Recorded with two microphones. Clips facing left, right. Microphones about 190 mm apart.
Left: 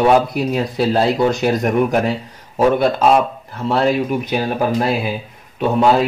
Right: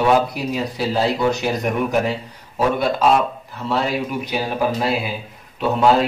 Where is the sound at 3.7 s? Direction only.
50° left (ahead or behind).